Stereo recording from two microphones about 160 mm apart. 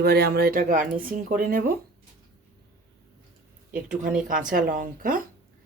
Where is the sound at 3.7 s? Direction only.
10° right (ahead or behind).